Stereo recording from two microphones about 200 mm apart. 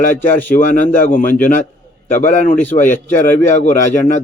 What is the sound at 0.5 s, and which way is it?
A man's voice, 40° left (ahead or behind).